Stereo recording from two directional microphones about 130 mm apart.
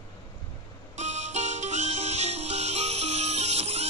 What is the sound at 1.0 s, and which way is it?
Music, 65° right (ahead or behind).